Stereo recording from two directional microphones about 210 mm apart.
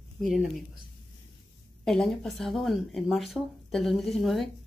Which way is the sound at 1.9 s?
Centre (ahead or behind).